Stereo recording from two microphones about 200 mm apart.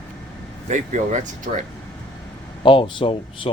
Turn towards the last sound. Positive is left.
turn(degrees=25)  # may be behind; listen again after turning